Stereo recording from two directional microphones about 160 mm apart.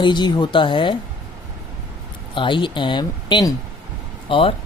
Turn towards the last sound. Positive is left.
turn(degrees=35)  # may be behind; listen again after turning